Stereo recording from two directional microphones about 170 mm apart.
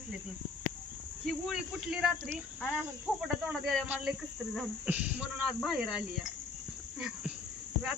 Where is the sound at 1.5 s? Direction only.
5° right (ahead or behind).